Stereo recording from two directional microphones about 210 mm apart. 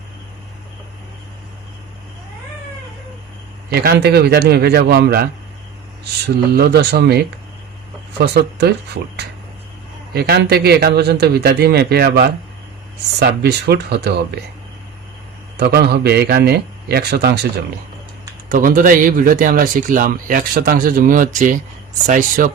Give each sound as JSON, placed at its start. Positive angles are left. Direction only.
{"t": 3.7, "sound": "a man's voice", "side_deg": -50}
{"t": 6.2, "sound": "a man's voice", "side_deg": -50}
{"t": 8.2, "sound": "a man's voice", "side_deg": -50}
{"t": 10.2, "sound": "a man's voice", "side_deg": -50}
{"t": 15.5, "sound": "a man's voice", "side_deg": -50}
{"t": 18.4, "sound": "speech", "side_deg": -40}